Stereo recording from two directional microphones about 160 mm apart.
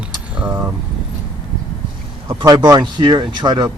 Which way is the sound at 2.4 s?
20° right (ahead or behind).